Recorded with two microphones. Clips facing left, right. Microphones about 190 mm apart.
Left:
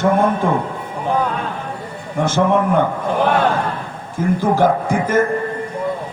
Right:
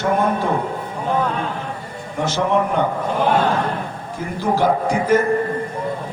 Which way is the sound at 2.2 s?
50° left (ahead or behind).